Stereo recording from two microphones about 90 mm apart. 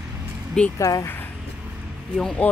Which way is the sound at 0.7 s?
40° left (ahead or behind).